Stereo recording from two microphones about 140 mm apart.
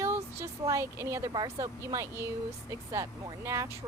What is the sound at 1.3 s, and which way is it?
Speech, 30° right (ahead or behind).